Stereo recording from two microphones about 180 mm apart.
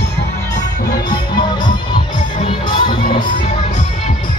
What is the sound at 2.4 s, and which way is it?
Music, 25° left (ahead or behind).